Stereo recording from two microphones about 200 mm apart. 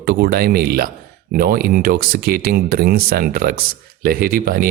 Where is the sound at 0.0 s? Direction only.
50° right (ahead or behind).